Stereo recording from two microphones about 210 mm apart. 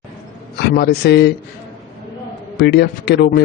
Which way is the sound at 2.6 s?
50° left (ahead or behind).